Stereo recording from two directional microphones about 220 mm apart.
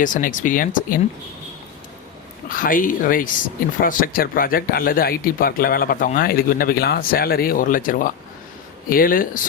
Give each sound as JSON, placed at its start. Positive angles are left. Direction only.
{"t": 0.0, "sound": "speech", "side_deg": 35}
{"t": 2.5, "sound": "speech", "side_deg": 40}